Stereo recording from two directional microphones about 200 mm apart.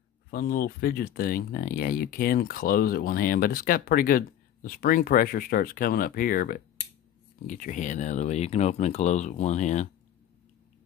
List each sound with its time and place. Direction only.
0.3 s speech: 45° left (ahead or behind)